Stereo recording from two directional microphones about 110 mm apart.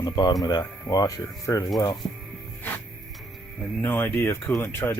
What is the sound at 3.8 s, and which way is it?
Speech, 20° left (ahead or behind).